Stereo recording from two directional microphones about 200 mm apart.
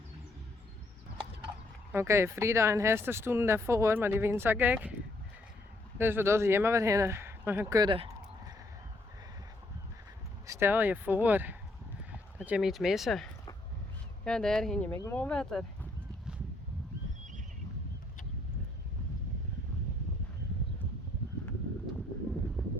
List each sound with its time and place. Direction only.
1.9 s speech: 15° right (ahead or behind)
6.0 s speech: 10° right (ahead or behind)
10.4 s speech: 15° right (ahead or behind)
14.3 s speech: 5° left (ahead or behind)